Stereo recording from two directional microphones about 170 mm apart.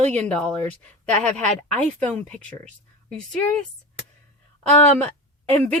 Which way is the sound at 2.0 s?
5° left (ahead or behind).